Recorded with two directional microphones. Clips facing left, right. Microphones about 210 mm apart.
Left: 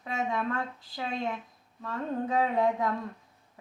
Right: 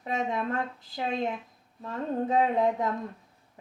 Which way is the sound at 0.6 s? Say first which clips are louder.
Right 2 dB; 20° right (ahead or behind).